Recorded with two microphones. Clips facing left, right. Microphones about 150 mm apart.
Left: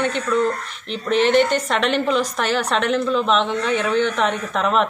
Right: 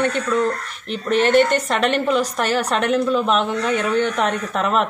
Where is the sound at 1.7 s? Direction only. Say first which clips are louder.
Right 1 dB; 5° right (ahead or behind).